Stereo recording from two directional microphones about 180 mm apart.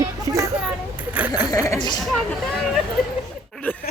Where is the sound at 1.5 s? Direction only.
20° left (ahead or behind).